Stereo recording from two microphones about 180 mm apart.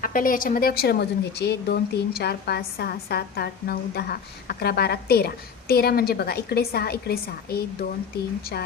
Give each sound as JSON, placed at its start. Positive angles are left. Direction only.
{"t": 0.0, "sound": "speech", "side_deg": 50}